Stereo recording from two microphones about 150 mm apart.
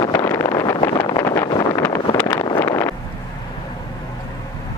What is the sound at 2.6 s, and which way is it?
Wind noise, 20° left (ahead or behind).